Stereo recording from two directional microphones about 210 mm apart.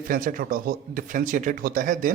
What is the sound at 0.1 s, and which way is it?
Speech, 40° right (ahead or behind).